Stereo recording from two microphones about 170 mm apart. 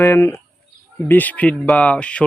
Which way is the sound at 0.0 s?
15° left (ahead or behind).